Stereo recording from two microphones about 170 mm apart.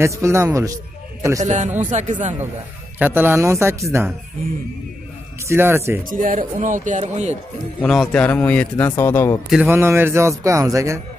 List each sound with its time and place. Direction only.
0.2 s a man's voice: 15° right (ahead or behind)
1.4 s speech: 45° right (ahead or behind)
3.0 s a man's voice: 10° right (ahead or behind)
5.5 s a man's voice: 15° right (ahead or behind)
6.0 s speech: 50° right (ahead or behind)
7.8 s a man's voice: 5° left (ahead or behind)
9.5 s a man's voice: 10° right (ahead or behind)